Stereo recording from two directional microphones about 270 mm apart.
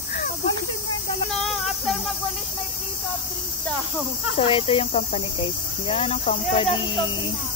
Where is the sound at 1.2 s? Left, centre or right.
Centre.